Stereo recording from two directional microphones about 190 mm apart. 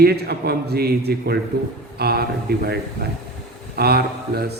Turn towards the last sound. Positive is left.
turn(degrees=-60)  # may be behind; listen again after turning